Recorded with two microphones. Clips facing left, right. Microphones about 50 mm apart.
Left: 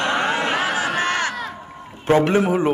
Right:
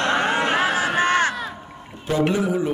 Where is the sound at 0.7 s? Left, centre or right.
Right.